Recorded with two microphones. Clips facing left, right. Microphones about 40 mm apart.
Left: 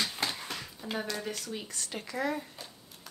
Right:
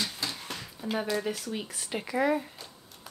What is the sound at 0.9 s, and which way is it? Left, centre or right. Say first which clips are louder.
Speech: right 5 dB; centre.